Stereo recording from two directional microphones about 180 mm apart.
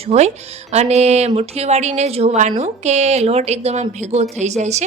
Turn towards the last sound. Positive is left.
turn(degrees=-40)  # may be behind; listen again after turning